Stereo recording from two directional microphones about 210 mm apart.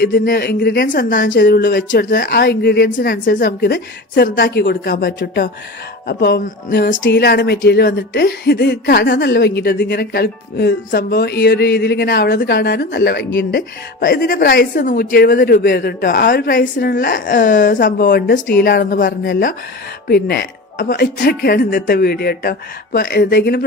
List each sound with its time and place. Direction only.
0.0 s speech: 45° left (ahead or behind)
4.7 s speech: 45° left (ahead or behind)